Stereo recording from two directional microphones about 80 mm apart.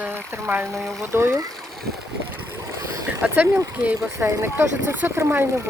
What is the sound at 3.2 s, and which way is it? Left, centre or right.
Speech, right.